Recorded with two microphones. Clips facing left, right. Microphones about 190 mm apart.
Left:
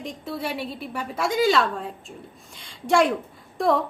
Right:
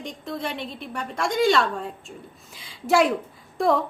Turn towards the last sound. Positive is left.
turn(degrees=0)  # may be behind; listen again after turning